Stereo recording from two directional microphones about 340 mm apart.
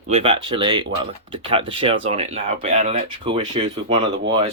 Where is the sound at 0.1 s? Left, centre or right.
Centre.